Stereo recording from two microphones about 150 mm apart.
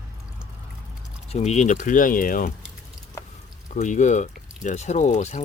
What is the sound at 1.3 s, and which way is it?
Speech, 45° left (ahead or behind).